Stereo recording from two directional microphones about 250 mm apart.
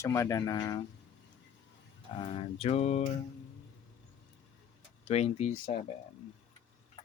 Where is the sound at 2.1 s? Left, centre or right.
Left.